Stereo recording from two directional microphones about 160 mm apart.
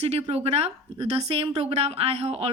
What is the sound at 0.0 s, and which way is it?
Speech, 40° right (ahead or behind).